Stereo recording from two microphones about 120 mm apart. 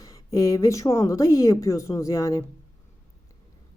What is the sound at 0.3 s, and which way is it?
Speech, 30° left (ahead or behind).